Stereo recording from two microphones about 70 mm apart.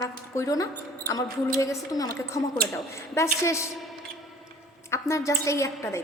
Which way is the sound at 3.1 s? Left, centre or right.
Left.